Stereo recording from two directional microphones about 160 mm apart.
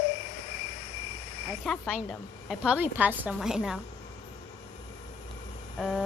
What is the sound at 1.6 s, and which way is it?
A woman's voice, 5° left (ahead or behind).